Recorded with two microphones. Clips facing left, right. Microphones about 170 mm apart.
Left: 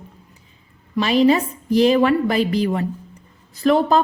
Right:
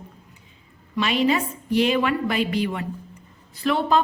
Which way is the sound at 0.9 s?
35° left (ahead or behind).